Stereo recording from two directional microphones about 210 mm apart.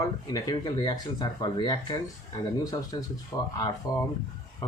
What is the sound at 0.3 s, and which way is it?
Speech, 20° left (ahead or behind).